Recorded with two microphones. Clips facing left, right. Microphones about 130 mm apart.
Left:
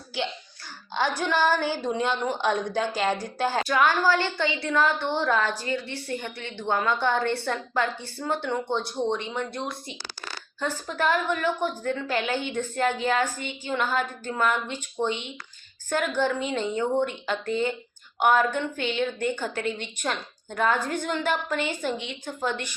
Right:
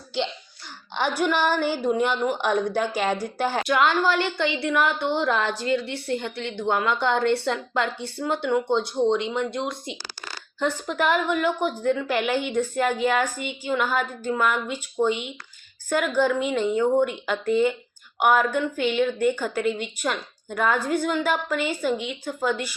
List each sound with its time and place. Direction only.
1.2 s a woman's voice: 15° right (ahead or behind)
6.6 s a woman's voice: 15° right (ahead or behind)